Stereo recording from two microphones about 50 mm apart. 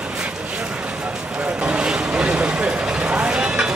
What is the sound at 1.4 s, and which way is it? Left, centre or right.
Vehicle, right.